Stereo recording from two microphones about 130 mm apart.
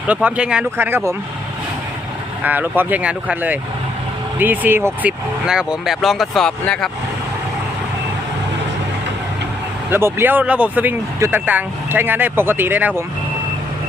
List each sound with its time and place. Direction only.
0.1 s speech: 10° right (ahead or behind)
2.4 s speech: 15° right (ahead or behind)
5.5 s speech: 5° right (ahead or behind)
9.9 s speech: 20° right (ahead or behind)